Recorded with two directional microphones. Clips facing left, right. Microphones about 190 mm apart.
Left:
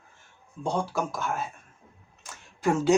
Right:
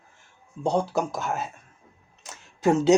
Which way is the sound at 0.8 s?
20° right (ahead or behind).